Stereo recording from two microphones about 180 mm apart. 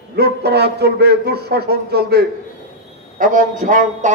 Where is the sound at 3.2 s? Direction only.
45° right (ahead or behind).